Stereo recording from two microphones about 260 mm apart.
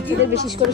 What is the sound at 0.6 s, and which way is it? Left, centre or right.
Speech, right.